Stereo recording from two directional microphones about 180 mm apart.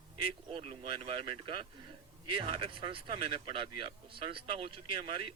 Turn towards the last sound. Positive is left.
turn(degrees=-30)  # may be behind; listen again after turning